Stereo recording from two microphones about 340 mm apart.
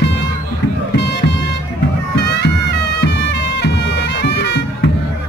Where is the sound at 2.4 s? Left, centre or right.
Left.